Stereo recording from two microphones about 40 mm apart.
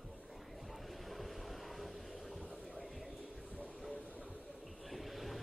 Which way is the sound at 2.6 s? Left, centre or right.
Centre.